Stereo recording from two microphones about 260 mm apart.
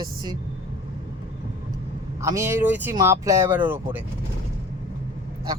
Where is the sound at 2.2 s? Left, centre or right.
Centre.